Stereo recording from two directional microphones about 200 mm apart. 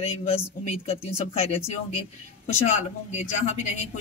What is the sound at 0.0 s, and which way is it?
Speech, 30° left (ahead or behind).